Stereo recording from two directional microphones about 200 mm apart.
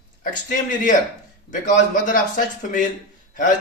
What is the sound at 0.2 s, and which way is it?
A man's voice, 45° left (ahead or behind).